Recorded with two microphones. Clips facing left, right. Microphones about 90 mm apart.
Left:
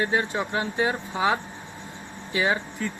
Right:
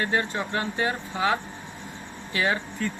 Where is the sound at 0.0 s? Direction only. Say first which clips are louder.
Left 1 dB; 10° left (ahead or behind).